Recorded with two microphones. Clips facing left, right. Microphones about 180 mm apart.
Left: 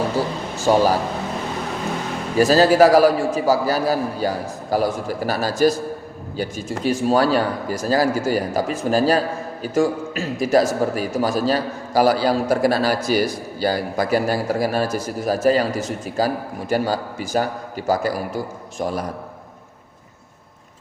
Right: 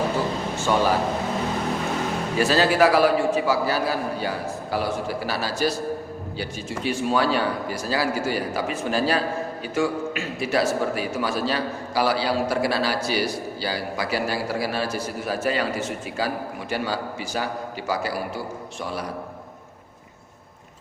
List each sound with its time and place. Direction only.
0.6 s a man's voice: 40° left (ahead or behind)
2.4 s a man's voice: 40° left (ahead or behind)